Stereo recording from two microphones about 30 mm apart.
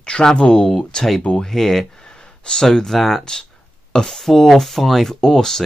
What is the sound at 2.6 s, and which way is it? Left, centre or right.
Speech, centre.